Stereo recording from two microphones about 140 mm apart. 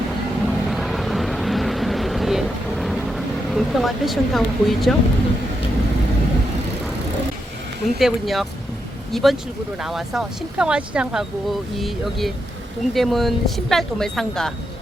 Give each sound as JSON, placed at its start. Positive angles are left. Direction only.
{"t": 0.4, "sound": "vehicle", "side_deg": 0}
{"t": 7.9, "sound": "speech", "side_deg": 0}
{"t": 12.9, "sound": "speech", "side_deg": 0}